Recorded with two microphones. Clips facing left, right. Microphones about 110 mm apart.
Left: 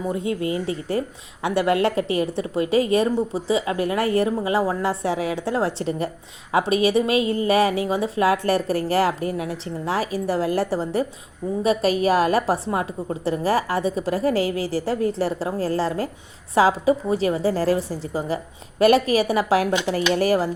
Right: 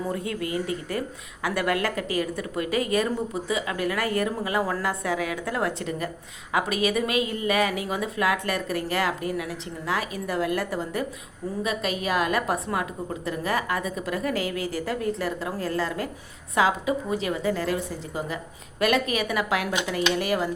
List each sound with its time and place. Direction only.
0.0 s a woman's voice: 20° left (ahead or behind)